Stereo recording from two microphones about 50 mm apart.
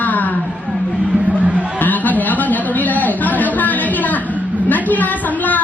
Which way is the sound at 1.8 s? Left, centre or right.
Left.